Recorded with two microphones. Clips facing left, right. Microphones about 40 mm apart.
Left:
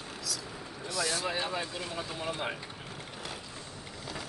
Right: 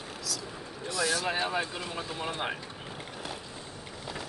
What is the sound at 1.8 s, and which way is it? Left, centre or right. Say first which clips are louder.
Speech: right 1 dB; centre.